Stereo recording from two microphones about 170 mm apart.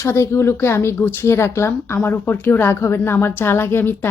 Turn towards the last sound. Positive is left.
turn(degrees=15)  # may be behind; listen again after turning